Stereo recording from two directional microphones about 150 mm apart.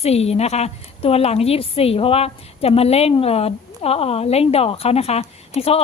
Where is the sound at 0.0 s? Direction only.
45° left (ahead or behind).